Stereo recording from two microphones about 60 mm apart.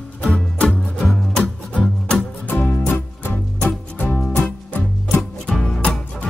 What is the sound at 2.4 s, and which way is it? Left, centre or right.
Music, left.